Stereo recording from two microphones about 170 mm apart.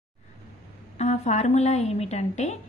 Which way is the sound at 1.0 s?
40° left (ahead or behind).